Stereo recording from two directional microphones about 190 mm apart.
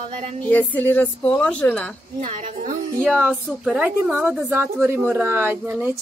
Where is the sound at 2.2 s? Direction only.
40° right (ahead or behind).